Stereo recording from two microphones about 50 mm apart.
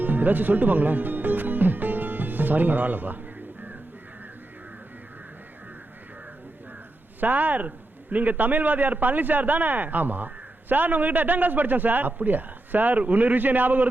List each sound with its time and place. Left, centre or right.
0.0 s music: right
7.2 s a man's voice: right